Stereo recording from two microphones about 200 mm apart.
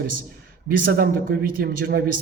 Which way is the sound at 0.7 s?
50° right (ahead or behind).